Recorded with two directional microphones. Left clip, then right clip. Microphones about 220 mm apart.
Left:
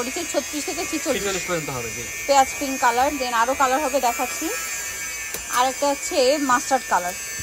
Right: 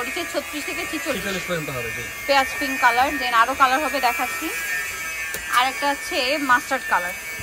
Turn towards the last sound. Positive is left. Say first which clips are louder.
# left 1 dB
turn(degrees=15)  # may be behind; listen again after turning